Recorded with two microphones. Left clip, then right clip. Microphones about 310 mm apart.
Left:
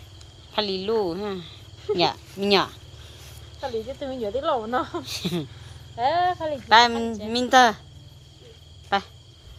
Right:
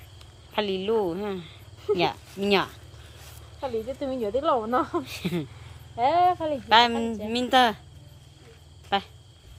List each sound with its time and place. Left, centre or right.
0.5 s a woman's voice: centre
3.7 s speech: right
5.0 s a woman's voice: centre
6.0 s speech: right
6.7 s a woman's voice: centre
8.9 s a woman's voice: centre